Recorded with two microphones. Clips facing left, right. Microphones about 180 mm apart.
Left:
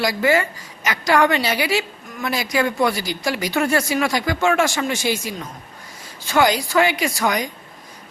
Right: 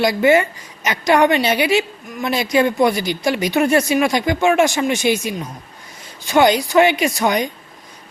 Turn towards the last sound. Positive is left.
turn(degrees=-20)  # may be behind; listen again after turning